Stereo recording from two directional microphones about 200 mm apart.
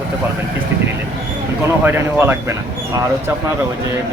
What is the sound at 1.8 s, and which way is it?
Speech, 10° right (ahead or behind).